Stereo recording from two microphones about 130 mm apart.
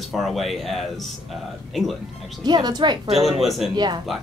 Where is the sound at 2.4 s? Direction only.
30° right (ahead or behind).